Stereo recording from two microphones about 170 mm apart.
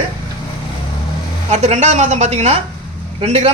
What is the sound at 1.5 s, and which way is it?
A woman's voice, 40° right (ahead or behind).